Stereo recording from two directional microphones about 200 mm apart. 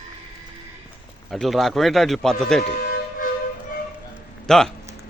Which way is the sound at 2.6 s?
45° left (ahead or behind).